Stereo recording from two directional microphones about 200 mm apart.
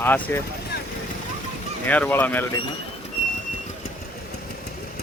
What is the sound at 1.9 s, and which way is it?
Speech, 10° left (ahead or behind).